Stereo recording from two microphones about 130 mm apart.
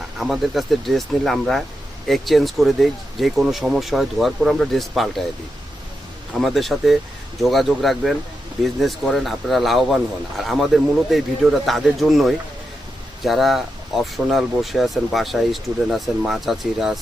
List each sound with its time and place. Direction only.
0.2 s speech: centre (ahead or behind)
6.3 s speech: centre (ahead or behind)